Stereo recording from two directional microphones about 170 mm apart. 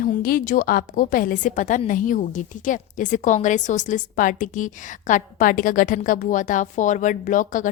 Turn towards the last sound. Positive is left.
turn(degrees=50)  # may be behind; listen again after turning